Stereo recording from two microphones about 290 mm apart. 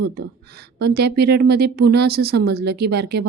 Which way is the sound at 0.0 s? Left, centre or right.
Right.